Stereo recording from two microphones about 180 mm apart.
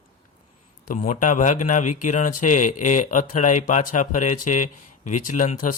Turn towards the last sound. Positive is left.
turn(degrees=45)  # may be behind; listen again after turning